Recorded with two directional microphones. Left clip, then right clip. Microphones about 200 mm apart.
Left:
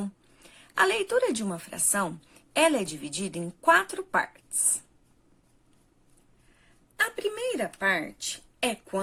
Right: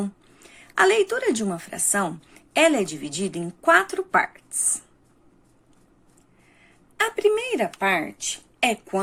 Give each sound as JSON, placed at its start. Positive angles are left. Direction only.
{"t": 0.5, "sound": "a woman's voice", "side_deg": 30}
{"t": 7.0, "sound": "a woman's voice", "side_deg": 35}